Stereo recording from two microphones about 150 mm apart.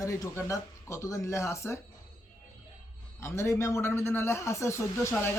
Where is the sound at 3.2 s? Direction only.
20° left (ahead or behind).